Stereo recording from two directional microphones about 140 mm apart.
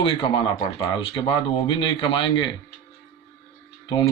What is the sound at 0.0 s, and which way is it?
Speech, 35° left (ahead or behind).